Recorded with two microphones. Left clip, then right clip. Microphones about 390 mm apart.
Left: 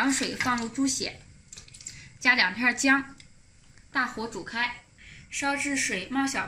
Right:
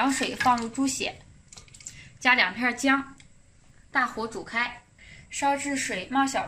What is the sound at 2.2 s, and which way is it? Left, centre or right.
A woman's voice, right.